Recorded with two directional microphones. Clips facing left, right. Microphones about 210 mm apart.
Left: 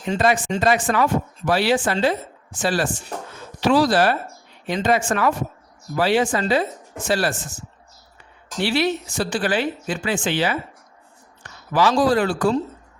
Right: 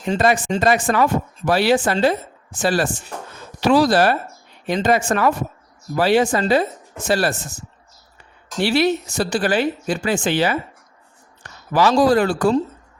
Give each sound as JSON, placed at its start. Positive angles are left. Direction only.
{"t": 0.0, "sound": "a woman's voice", "side_deg": -45}
{"t": 8.6, "sound": "speech", "side_deg": -40}